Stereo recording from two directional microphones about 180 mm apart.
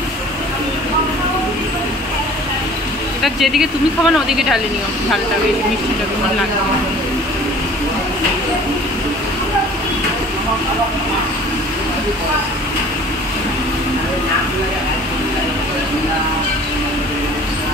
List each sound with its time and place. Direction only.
3.2 s speech: centre (ahead or behind)